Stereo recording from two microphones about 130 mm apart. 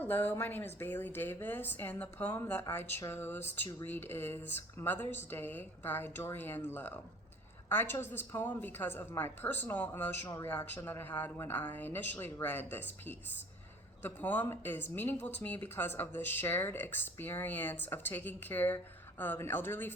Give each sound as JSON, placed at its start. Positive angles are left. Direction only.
{"t": 0.0, "sound": "a woman's voice", "side_deg": 15}